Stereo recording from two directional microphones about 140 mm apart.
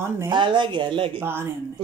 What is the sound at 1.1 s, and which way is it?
Speech, 15° right (ahead or behind).